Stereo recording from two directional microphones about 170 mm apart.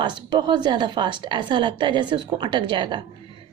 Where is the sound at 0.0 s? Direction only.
25° right (ahead or behind).